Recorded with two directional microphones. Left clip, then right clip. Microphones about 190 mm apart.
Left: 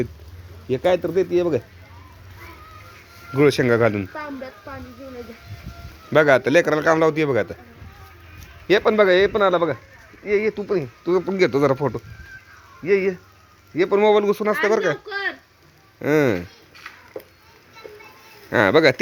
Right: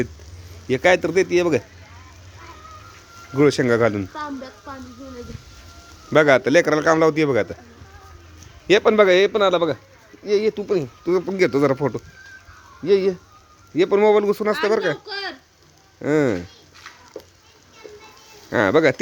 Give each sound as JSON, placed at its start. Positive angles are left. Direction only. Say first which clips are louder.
{"t": 0.7, "sound": "speech", "louder": "right 3 dB", "side_deg": -15}
{"t": 3.3, "sound": "a man's voice", "louder": "even", "side_deg": -10}
{"t": 6.1, "sound": "a man's voice", "louder": "even", "side_deg": -15}
{"t": 8.6, "sound": "a man's voice", "louder": "right 2 dB", "side_deg": -25}
{"t": 16.0, "sound": "speech", "louder": "left 1 dB", "side_deg": 0}
{"t": 17.2, "sound": "children playing", "louder": "left 2 dB", "side_deg": -20}
{"t": 18.5, "sound": "a man's voice", "louder": "left 1 dB", "side_deg": -10}